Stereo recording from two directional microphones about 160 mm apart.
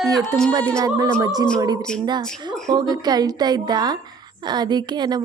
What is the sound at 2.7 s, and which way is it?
A woman's voice, 25° right (ahead or behind).